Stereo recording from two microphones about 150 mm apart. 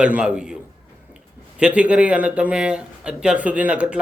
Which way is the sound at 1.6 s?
5° right (ahead or behind).